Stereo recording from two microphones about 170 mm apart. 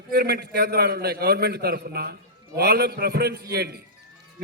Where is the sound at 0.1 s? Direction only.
70° right (ahead or behind).